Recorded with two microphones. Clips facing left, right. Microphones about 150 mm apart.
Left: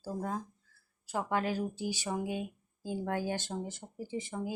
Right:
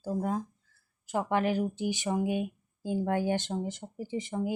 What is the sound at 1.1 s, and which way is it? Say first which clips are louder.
Speech: right 4 dB; 20° right (ahead or behind).